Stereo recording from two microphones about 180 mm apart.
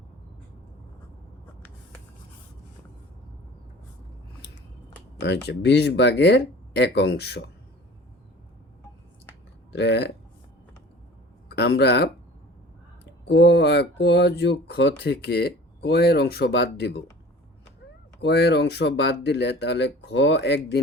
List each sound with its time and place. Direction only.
5.2 s speech: 70° left (ahead or behind)
9.7 s speech: 70° left (ahead or behind)
11.4 s speech: 70° left (ahead or behind)
13.2 s speech: 65° left (ahead or behind)
18.2 s speech: 65° left (ahead or behind)